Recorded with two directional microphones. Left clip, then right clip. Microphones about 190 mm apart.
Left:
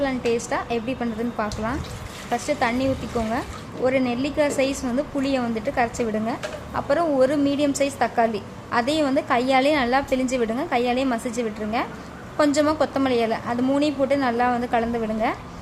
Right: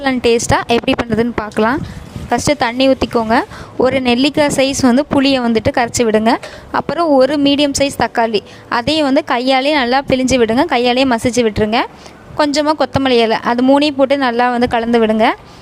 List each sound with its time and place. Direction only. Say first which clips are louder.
0.0 s speech: right 10 dB; 55° right (ahead or behind)
2.3 s speech: right 8 dB; 55° right (ahead or behind)